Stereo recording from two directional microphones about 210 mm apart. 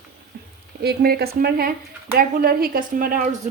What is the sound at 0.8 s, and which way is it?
Speech, 50° right (ahead or behind).